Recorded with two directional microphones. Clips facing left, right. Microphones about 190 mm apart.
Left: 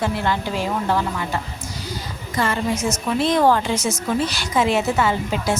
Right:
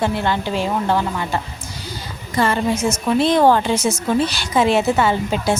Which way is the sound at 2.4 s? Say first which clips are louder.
Right 4 dB; 30° right (ahead or behind).